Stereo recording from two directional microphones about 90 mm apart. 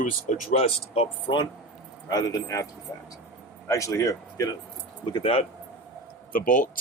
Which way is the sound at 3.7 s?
35° left (ahead or behind).